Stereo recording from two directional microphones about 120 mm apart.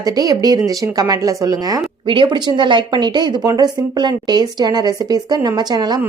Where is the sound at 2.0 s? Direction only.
40° right (ahead or behind).